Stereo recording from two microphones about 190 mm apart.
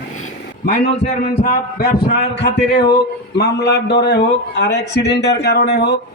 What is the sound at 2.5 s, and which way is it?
A man's voice, 60° left (ahead or behind).